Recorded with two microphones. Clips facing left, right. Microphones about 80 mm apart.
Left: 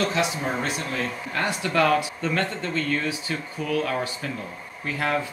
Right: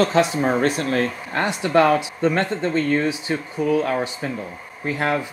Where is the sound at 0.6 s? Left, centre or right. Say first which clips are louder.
Right 8 dB; right.